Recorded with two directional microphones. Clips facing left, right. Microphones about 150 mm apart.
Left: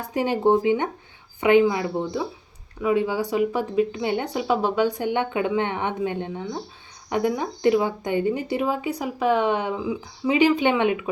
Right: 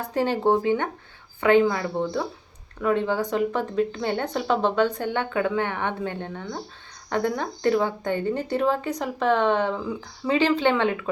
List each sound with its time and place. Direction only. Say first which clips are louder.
0.1 s speech: left 2 dB; 15° left (ahead or behind)